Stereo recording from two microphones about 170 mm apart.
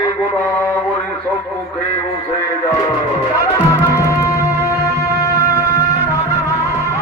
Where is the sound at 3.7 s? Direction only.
20° left (ahead or behind).